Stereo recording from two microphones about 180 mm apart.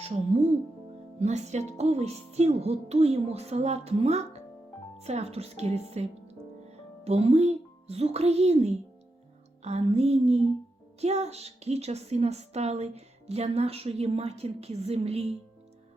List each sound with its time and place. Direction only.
0.0 s a woman's voice: 35° right (ahead or behind)